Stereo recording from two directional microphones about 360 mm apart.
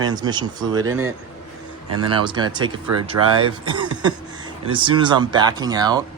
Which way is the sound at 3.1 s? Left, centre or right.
Right.